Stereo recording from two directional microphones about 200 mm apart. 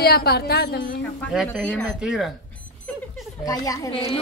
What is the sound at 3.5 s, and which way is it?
Speech, 15° left (ahead or behind).